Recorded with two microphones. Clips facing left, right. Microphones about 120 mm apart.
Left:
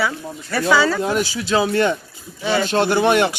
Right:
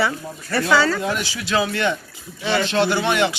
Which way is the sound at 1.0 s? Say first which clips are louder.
Left 4 dB; 35° left (ahead or behind).